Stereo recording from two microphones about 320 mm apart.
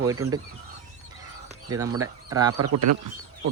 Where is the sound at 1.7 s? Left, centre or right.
Centre.